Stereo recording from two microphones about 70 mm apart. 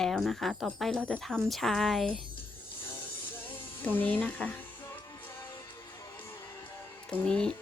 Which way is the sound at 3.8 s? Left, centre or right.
Left.